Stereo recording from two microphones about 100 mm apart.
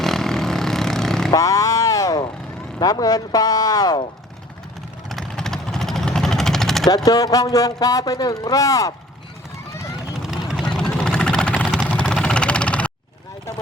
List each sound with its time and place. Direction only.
0.0 s vehicle: 5° left (ahead or behind)
1.3 s vehicle: 35° left (ahead or behind)
2.7 s speech: 40° left (ahead or behind)
5.0 s vehicle: 5° left (ahead or behind)
6.8 s speech: 40° left (ahead or behind)
10.5 s vehicle: 5° left (ahead or behind)